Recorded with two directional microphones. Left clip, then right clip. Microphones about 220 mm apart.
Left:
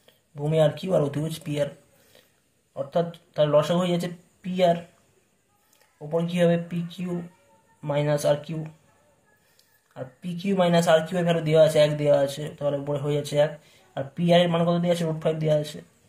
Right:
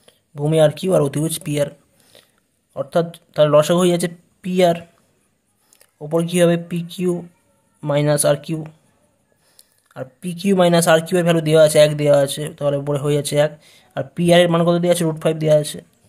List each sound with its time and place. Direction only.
0.0 s speech: 45° right (ahead or behind)